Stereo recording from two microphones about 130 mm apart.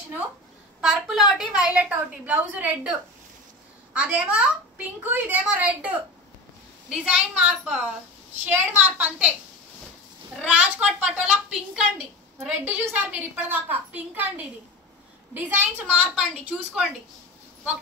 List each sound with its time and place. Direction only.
0.7 s a woman's voice: 5° right (ahead or behind)
6.9 s a woman's voice: 5° right (ahead or behind)
10.4 s a woman's voice: 10° right (ahead or behind)